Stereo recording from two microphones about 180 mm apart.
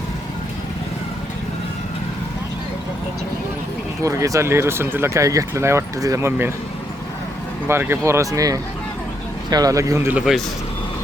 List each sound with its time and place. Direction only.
4.0 s speech: 15° right (ahead or behind)
7.7 s speech: 15° right (ahead or behind)